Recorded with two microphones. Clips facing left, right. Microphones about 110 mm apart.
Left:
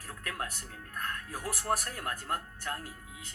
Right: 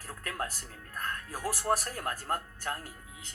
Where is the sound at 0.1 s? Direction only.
35° right (ahead or behind).